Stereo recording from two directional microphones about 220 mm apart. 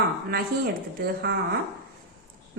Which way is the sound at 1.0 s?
45° right (ahead or behind).